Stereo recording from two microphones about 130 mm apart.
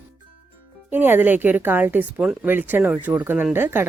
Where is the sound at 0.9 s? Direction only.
15° right (ahead or behind).